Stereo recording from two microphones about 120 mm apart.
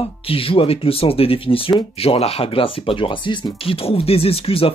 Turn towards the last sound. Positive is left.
turn(degrees=50)  # may be behind; listen again after turning